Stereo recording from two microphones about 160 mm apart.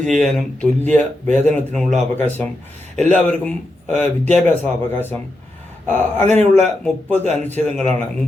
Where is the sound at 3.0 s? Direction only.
10° left (ahead or behind).